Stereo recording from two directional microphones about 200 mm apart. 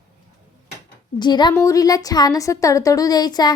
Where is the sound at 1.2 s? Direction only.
20° left (ahead or behind).